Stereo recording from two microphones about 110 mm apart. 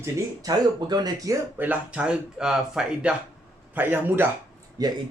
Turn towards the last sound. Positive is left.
turn(degrees=-35)  # may be behind; listen again after turning